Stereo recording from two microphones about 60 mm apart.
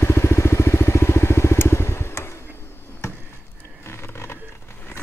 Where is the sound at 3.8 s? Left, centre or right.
Left.